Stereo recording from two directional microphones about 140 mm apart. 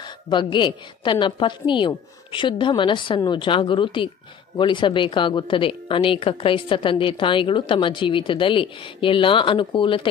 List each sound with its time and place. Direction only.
0.0 s speech: 35° left (ahead or behind)